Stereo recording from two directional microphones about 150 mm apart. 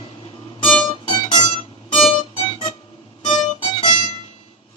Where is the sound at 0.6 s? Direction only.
40° left (ahead or behind).